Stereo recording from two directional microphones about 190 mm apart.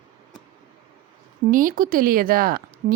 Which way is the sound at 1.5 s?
45° right (ahead or behind).